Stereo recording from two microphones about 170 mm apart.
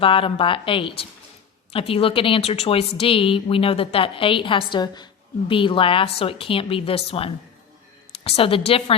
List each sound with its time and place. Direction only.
0.0 s a woman's voice: 30° left (ahead or behind)